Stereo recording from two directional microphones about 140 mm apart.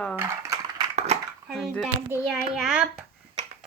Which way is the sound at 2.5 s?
5° right (ahead or behind).